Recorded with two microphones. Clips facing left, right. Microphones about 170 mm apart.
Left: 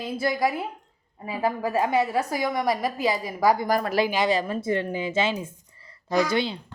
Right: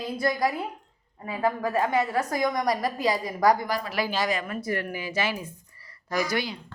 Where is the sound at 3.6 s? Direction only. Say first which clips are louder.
Left 6 dB; 50° left (ahead or behind).